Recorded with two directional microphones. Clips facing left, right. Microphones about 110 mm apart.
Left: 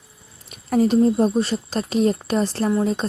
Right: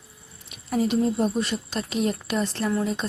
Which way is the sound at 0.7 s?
40° left (ahead or behind).